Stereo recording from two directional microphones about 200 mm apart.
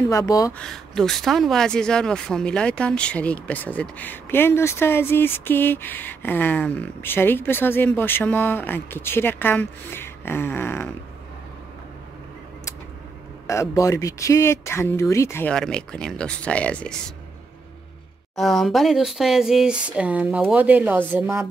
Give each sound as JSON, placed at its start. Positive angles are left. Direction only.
{"t": 0.1, "sound": "speech", "side_deg": 15}
{"t": 0.6, "sound": "speech", "side_deg": 0}
{"t": 13.5, "sound": "speech", "side_deg": 15}
{"t": 18.3, "sound": "a woman's voice", "side_deg": 0}